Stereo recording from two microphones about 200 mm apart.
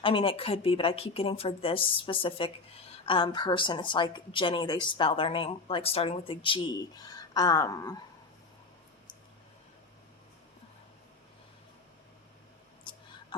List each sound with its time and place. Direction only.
0.0 s a woman's voice: 25° left (ahead or behind)